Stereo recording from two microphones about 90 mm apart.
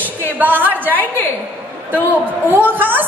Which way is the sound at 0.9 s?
20° left (ahead or behind).